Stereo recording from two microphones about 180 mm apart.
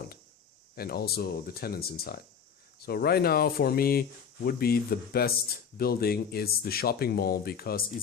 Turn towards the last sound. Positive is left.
turn(degrees=60)  # may be behind; listen again after turning